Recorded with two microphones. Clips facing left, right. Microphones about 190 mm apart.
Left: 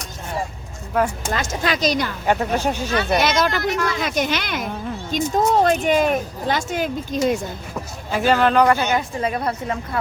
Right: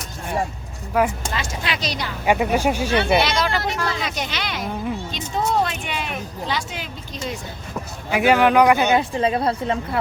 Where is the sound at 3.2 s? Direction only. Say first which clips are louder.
Left 2 dB; 45° left (ahead or behind).